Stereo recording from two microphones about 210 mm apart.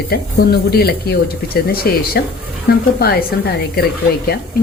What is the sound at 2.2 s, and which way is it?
Speech, 50° left (ahead or behind).